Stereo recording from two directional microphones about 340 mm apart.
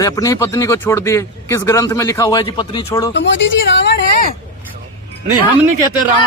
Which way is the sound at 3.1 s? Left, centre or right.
Left.